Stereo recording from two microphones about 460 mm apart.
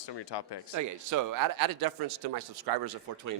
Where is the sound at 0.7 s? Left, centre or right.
Right.